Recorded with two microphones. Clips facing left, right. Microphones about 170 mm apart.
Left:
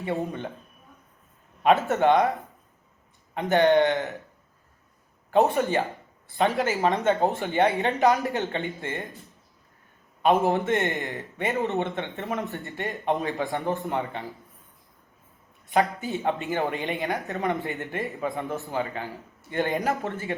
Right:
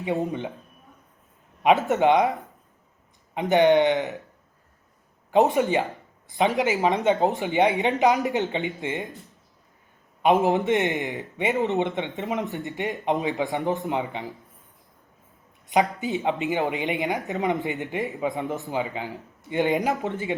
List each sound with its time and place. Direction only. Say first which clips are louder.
0.0 s speech: right 3 dB; 15° right (ahead or behind)
1.6 s speech: right 1 dB; 15° right (ahead or behind)
3.3 s speech: right 2 dB; 15° right (ahead or behind)
5.3 s speech: right 2 dB; 15° right (ahead or behind)
10.2 s speech: right 2 dB; 15° right (ahead or behind)
15.7 s speech: right 2 dB; 15° right (ahead or behind)